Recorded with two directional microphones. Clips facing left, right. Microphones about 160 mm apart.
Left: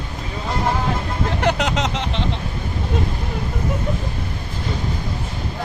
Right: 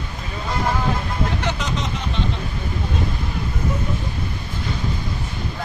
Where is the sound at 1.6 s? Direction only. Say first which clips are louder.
Left 4 dB; 90° left.